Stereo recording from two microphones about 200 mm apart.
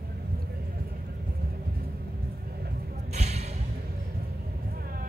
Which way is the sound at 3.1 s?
35° right (ahead or behind).